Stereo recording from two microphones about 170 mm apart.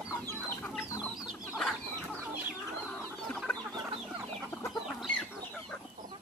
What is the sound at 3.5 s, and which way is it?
Chicken, 15° left (ahead or behind).